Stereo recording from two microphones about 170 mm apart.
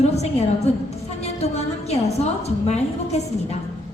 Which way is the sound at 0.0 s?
40° left (ahead or behind).